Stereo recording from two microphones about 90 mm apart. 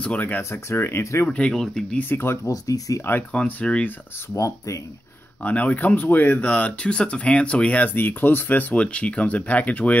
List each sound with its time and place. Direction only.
0.0 s speech: 15° left (ahead or behind)
0.4 s speech: 30° left (ahead or behind)
1.3 s speech: 10° left (ahead or behind)
2.0 s speech: 25° left (ahead or behind)
2.5 s speech: 40° left (ahead or behind)
3.3 s speech: 15° left (ahead or behind)
4.4 s speech: 35° left (ahead or behind)
5.4 s speech: 15° left (ahead or behind)